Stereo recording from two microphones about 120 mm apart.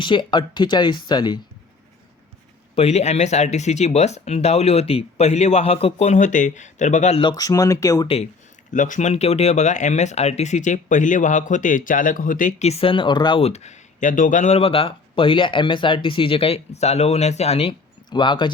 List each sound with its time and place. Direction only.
0.0 s speech: 40° left (ahead or behind)
2.7 s speech: 65° left (ahead or behind)
7.2 s speech: 35° left (ahead or behind)
8.0 s speech: 55° left (ahead or behind)
8.7 s speech: 90° left; by 13.4 s 40° left (ahead or behind)
13.4 s speech: 70° left (ahead or behind)
18.1 s speech: 40° left (ahead or behind)